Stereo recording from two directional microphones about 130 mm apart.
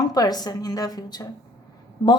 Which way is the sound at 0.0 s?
30° left (ahead or behind).